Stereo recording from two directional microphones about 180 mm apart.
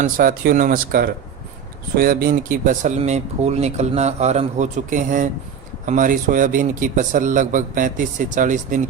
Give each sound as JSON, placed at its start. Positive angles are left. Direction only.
{"t": 0.0, "sound": "a man's voice", "side_deg": -50}